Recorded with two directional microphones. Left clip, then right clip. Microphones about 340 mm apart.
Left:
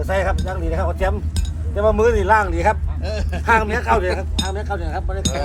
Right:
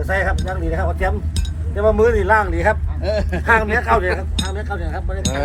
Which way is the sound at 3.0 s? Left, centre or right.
Right.